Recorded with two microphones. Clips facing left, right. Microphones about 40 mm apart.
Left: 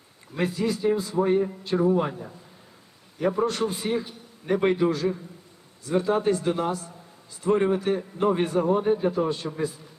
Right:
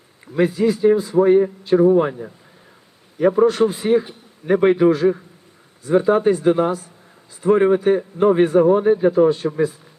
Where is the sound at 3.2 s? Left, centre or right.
Centre.